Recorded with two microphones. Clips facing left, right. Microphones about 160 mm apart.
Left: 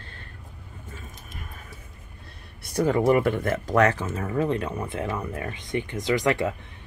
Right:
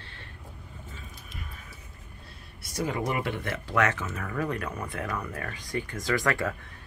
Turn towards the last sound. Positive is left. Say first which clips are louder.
# left 4 dB
turn(degrees=20)  # may be behind; listen again after turning